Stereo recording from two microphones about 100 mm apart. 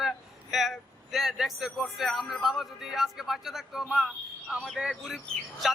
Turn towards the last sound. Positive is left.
turn(degrees=0)  # may be behind; listen again after turning